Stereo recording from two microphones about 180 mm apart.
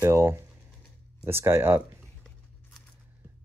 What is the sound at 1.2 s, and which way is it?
Speech, 15° right (ahead or behind).